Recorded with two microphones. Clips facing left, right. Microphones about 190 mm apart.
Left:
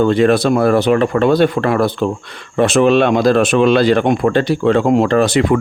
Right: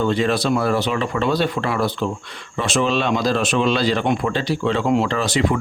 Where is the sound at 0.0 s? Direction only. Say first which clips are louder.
Left 7 dB; 55° left (ahead or behind).